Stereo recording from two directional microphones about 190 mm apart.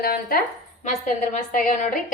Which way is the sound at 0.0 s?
50° left (ahead or behind).